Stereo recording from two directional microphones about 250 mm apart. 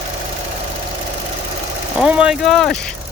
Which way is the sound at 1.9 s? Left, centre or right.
Centre.